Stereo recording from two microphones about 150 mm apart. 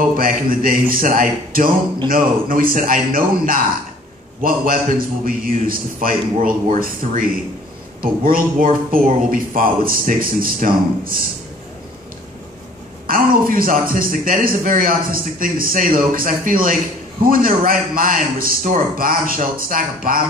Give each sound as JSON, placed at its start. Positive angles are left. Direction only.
{"t": 0.2, "sound": "speech", "side_deg": -70}
{"t": 13.0, "sound": "speech", "side_deg": -65}